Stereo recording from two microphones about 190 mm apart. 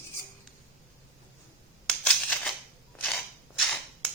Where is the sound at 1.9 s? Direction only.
5° left (ahead or behind).